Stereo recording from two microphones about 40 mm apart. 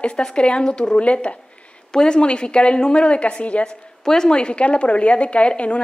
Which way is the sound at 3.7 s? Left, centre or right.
Centre.